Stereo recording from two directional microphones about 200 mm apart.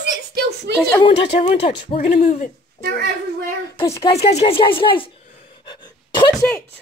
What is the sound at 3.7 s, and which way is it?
Speech, 15° left (ahead or behind).